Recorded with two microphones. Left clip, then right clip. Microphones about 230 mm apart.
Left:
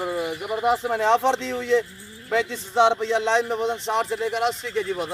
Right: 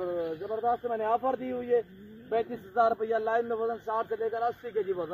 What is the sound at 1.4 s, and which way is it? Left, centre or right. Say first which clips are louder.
Speech: left 6 dB; left.